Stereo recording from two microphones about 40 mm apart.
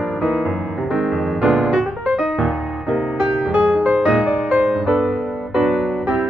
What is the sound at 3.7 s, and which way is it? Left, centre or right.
Music, right.